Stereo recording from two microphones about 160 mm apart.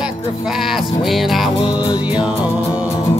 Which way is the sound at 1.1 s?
Centre (ahead or behind).